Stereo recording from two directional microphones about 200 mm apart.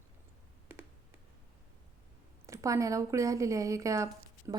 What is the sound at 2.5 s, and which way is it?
Speech, 15° right (ahead or behind).